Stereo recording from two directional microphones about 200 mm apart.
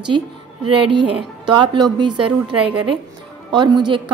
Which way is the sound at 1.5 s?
25° right (ahead or behind).